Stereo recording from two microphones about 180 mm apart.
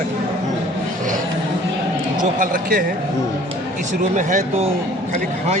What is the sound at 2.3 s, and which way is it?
Speech, 50° right (ahead or behind).